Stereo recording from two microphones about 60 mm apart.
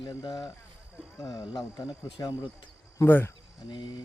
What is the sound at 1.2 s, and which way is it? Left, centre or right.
Speech, left.